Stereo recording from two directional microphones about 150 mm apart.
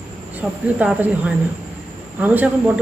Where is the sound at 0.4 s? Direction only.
10° right (ahead or behind).